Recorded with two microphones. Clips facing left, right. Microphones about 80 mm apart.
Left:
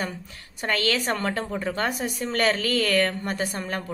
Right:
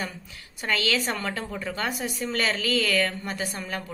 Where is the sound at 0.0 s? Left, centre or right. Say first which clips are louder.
Left 3 dB; left.